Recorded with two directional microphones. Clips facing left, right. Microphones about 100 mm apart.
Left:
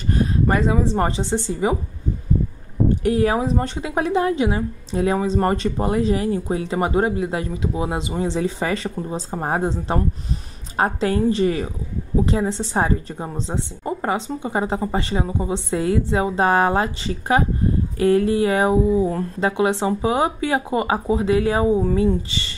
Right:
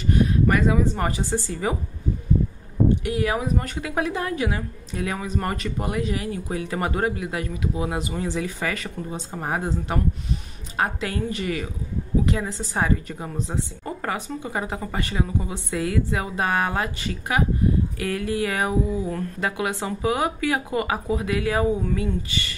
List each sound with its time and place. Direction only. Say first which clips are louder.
0.0 s speech: even; 35° left (ahead or behind)
3.0 s a woman's voice: left 6 dB; 35° left (ahead or behind)